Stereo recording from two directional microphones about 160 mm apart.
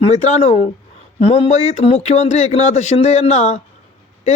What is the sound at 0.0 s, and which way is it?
Speech, 45° left (ahead or behind).